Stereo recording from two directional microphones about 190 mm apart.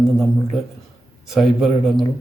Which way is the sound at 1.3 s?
Centre (ahead or behind).